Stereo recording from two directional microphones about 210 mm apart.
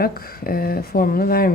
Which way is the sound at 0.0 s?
45° left (ahead or behind).